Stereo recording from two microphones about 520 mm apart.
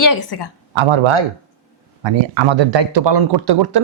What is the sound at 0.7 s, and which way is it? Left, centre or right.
Speech, right.